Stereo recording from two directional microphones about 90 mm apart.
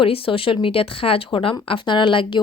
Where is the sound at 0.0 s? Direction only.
85° left.